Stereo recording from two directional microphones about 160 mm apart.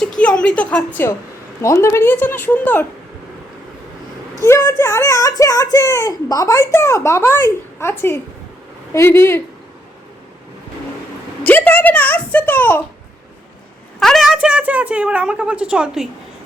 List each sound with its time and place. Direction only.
0.0 s a sound: 5° left (ahead or behind)
1.6 s a woman's voice: 20° left (ahead or behind)
4.4 s a woman's voice: 15° left (ahead or behind)
11.4 s a woman's voice: 10° left (ahead or behind)
14.0 s a woman's voice: centre (ahead or behind)